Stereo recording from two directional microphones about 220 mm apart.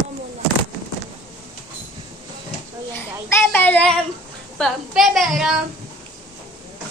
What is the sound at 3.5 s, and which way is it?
Child singing, 5° left (ahead or behind).